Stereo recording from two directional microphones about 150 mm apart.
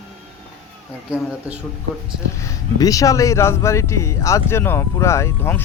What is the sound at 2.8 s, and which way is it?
Speech, 25° left (ahead or behind).